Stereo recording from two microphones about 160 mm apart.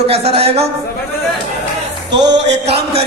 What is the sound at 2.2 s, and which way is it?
Speech, 90° right.